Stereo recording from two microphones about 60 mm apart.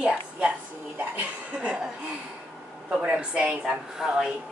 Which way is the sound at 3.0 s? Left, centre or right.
Centre.